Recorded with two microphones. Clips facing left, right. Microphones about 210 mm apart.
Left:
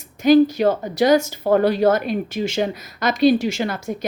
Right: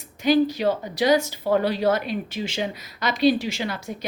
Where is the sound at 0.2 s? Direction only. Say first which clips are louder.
Left 6 dB; 45° left (ahead or behind).